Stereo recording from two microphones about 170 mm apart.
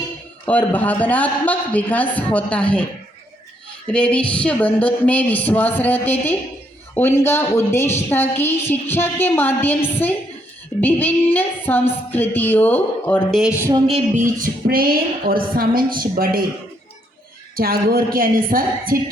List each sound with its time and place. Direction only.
0.4 s a woman's voice: 10° left (ahead or behind)
3.9 s a woman's voice: 5° left (ahead or behind)
10.8 s a woman's voice: 10° left (ahead or behind)
13.8 s music: 40° right (ahead or behind); by 16.5 s 60° right (ahead or behind)
17.5 s music: 60° right (ahead or behind)